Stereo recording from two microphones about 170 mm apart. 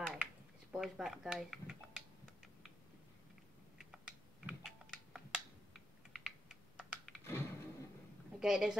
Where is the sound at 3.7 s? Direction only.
5° right (ahead or behind).